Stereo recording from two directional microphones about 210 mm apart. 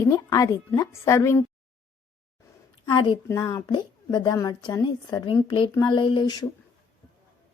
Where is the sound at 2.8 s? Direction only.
20° left (ahead or behind).